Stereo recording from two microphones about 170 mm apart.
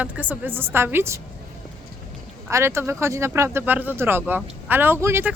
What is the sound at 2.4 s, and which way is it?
Speech, 15° right (ahead or behind).